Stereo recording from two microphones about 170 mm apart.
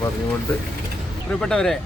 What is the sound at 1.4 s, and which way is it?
Speech, 5° left (ahead or behind).